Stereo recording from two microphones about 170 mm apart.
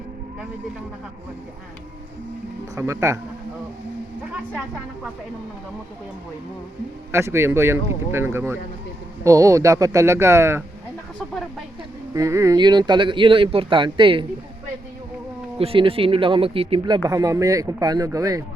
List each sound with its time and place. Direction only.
2.7 s speech: 15° right (ahead or behind)
7.1 s speech: 15° right (ahead or behind)
12.1 s speech: 20° right (ahead or behind)
15.5 s speech: 35° right (ahead or behind)